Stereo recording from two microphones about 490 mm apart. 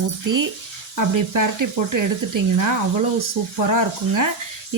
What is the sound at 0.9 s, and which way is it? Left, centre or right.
Speech, right.